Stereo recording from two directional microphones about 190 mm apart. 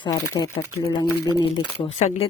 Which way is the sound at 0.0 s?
20° left (ahead or behind).